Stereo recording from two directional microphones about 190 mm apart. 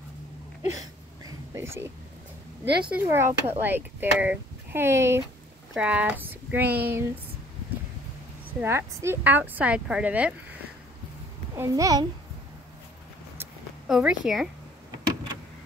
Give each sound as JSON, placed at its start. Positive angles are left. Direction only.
{"t": 0.6, "sound": "a sound", "side_deg": -15}
{"t": 2.6, "sound": "speech", "side_deg": -60}
{"t": 2.9, "sound": "speech", "side_deg": -10}
{"t": 8.5, "sound": "speech", "side_deg": -15}
{"t": 11.5, "sound": "a child's voice", "side_deg": -20}
{"t": 13.8, "sound": "speech", "side_deg": 0}